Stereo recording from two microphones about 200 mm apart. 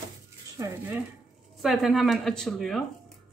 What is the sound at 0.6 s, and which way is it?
Speech, 15° right (ahead or behind).